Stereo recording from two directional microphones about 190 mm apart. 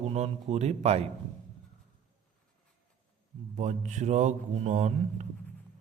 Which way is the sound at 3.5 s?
40° right (ahead or behind).